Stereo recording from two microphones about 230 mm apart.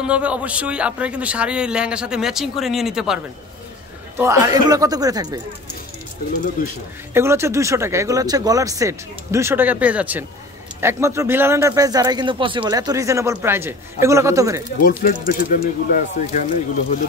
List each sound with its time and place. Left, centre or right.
0.0 s a man's voice: centre
4.2 s speech: centre
7.2 s speech: centre
14.8 s speech: left